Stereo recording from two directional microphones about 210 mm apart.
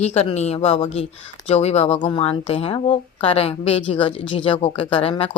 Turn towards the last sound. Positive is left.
turn(degrees=25)  # may be behind; listen again after turning